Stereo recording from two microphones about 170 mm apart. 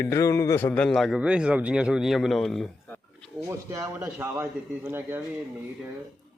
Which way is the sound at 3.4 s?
20° right (ahead or behind).